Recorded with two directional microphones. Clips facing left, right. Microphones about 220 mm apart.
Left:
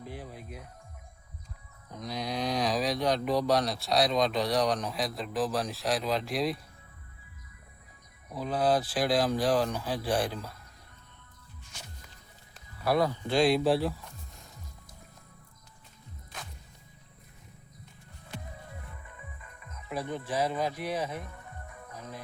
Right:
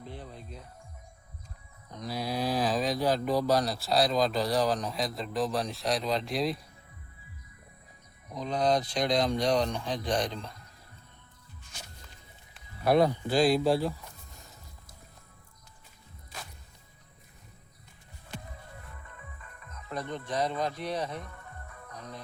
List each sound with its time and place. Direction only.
0.0 s speech: 10° left (ahead or behind)
1.9 s speech: centre (ahead or behind)
8.3 s speech: 5° left (ahead or behind)
12.8 s speech: 20° right (ahead or behind)
13.2 s speech: centre (ahead or behind)
19.0 s speech: 10° left (ahead or behind)
21.9 s music: 5° left (ahead or behind)